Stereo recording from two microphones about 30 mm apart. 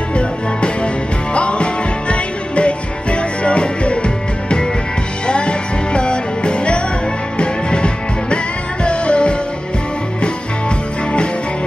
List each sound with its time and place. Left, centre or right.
1.3 s music: left